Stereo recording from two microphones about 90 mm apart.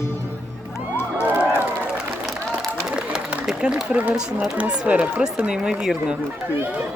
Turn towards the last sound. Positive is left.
turn(degrees=-5)  # may be behind; listen again after turning